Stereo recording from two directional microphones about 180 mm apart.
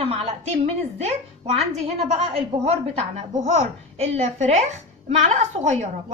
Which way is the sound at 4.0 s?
35° right (ahead or behind).